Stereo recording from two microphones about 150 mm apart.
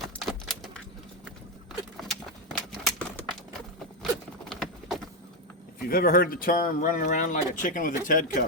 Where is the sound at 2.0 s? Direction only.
Centre (ahead or behind).